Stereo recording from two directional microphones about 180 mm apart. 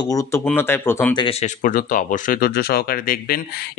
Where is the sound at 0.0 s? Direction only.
20° left (ahead or behind).